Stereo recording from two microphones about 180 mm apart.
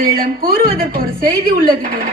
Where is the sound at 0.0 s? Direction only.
55° right (ahead or behind).